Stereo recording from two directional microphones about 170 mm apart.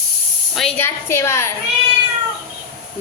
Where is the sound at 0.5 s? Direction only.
5° left (ahead or behind).